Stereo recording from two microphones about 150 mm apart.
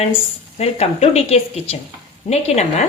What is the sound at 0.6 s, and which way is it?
Speech, 45° left (ahead or behind).